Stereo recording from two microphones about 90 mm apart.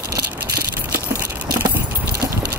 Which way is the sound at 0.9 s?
25° right (ahead or behind).